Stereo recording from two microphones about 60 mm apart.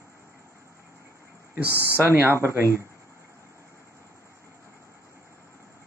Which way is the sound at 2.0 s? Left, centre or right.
Right.